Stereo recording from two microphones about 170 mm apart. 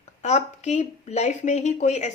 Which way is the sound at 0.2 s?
40° left (ahead or behind).